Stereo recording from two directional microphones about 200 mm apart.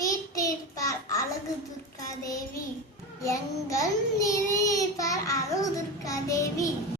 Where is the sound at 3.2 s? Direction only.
15° left (ahead or behind).